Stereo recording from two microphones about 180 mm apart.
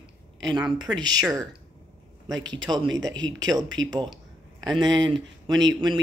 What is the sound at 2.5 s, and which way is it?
A woman's voice, 25° right (ahead or behind).